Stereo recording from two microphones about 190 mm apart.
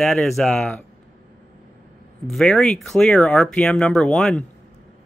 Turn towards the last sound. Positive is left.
turn(degrees=0)  # may be behind; listen again after turning